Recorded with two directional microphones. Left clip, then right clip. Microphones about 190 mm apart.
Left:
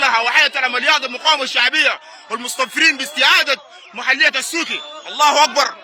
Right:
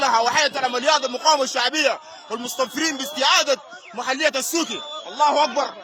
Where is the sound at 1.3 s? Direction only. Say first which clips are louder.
Left 2 dB; 10° right (ahead or behind).